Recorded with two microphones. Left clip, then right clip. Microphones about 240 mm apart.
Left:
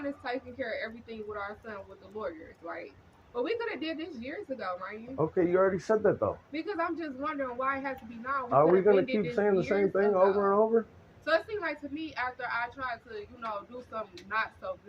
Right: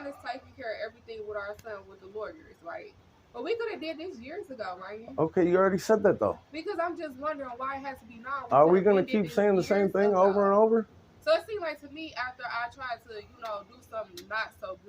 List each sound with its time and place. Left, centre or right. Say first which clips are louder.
0.2 s a woman's voice: left 3 dB; centre
3.4 s a woman's voice: right 1 dB; centre
5.1 s speech: right 2 dB; right
6.5 s a woman's voice: right 1 dB; centre
8.4 s speech: right 2 dB; right
11.3 s a woman's voice: right 2 dB; centre